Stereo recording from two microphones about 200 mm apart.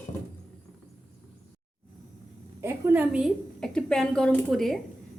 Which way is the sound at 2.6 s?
10° right (ahead or behind).